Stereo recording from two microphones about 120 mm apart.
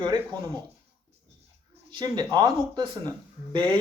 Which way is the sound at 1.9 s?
40° right (ahead or behind).